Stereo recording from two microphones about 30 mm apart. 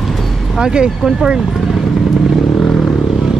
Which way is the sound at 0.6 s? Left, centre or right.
Right.